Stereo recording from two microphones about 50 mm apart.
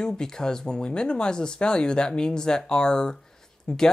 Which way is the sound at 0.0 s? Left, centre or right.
Centre.